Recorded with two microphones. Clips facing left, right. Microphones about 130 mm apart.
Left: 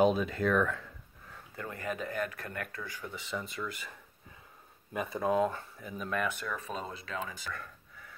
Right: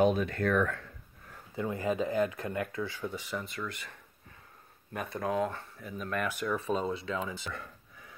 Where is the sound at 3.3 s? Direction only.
Centre (ahead or behind).